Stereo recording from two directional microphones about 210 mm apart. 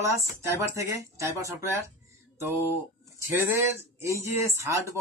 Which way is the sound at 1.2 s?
15° right (ahead or behind).